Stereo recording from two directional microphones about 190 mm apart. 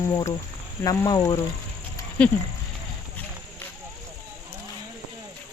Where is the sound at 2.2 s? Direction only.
5° left (ahead or behind).